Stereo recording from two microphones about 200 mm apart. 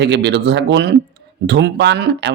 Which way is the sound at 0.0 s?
60° right (ahead or behind).